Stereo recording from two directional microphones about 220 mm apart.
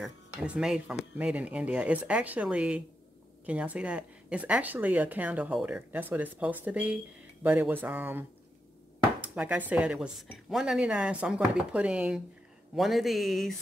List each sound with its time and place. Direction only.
0.0 s a woman's voice: 5° right (ahead or behind)